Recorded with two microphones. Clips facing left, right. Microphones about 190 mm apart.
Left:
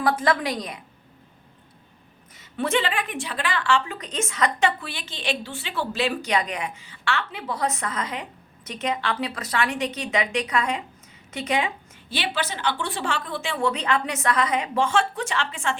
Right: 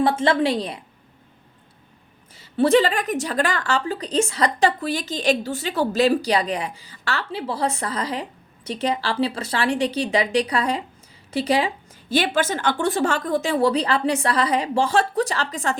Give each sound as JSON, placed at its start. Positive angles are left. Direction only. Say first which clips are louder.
{"t": 0.0, "sound": "a woman's voice", "louder": "right 4 dB", "side_deg": -25}
{"t": 2.3, "sound": "a woman's voice", "louder": "right 8 dB", "side_deg": -30}